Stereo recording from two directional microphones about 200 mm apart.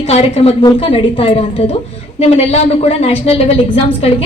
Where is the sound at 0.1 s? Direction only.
30° left (ahead or behind).